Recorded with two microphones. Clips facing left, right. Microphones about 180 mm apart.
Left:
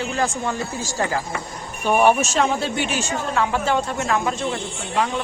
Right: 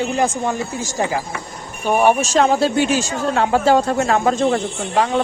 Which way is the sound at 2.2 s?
35° right (ahead or behind).